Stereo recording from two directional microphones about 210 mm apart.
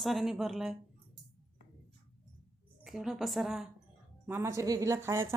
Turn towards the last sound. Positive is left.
turn(degrees=-10)  # may be behind; listen again after turning